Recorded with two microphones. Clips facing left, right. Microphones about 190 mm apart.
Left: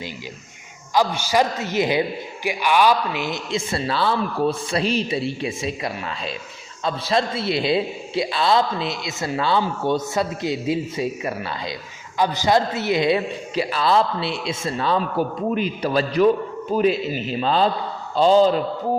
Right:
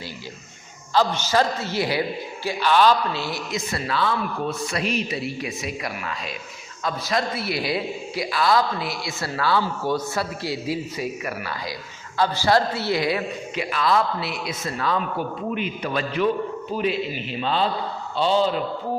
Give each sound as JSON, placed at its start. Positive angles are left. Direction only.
{"t": 0.9, "sound": "a man's voice", "side_deg": 10}